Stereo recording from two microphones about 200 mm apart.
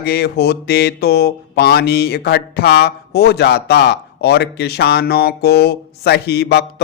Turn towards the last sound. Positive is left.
turn(degrees=55)  # may be behind; listen again after turning